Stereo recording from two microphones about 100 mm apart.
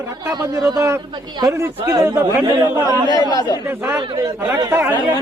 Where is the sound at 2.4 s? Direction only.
45° right (ahead or behind).